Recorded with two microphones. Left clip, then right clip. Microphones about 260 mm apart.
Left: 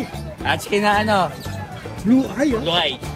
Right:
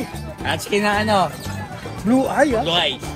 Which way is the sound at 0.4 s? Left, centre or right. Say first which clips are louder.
Left 1 dB; left.